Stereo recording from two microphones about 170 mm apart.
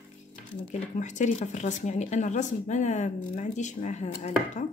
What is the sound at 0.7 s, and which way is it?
Speech, 45° left (ahead or behind).